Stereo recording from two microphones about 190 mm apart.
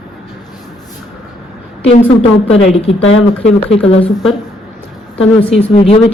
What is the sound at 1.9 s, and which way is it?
Speech, 35° left (ahead or behind).